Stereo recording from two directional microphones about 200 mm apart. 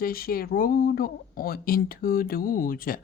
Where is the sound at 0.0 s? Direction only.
45° left (ahead or behind).